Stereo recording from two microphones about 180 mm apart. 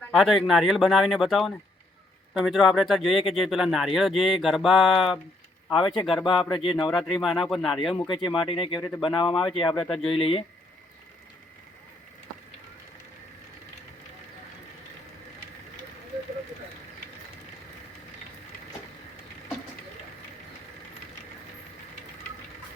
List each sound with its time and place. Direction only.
0.1 s speech: centre (ahead or behind)
5.7 s speech: 30° left (ahead or behind)
6.9 s speech: centre (ahead or behind)
7.9 s speech: 25° left (ahead or behind)